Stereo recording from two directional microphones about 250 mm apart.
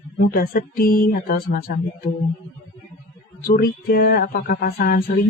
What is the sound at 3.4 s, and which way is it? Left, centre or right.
Mantra, left.